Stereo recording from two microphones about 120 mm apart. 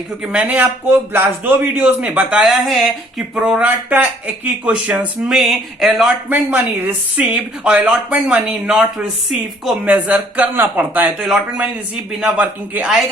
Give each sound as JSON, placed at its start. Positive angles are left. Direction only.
{"t": 0.3, "sound": "speech", "side_deg": -15}
{"t": 2.4, "sound": "speech", "side_deg": 0}
{"t": 6.2, "sound": "speech", "side_deg": -15}
{"t": 9.8, "sound": "speech", "side_deg": -15}